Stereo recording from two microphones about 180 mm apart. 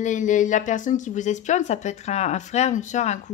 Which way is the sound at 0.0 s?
45° left (ahead or behind).